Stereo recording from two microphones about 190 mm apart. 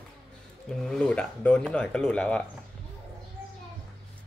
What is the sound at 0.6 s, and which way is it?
Speech, 5° left (ahead or behind).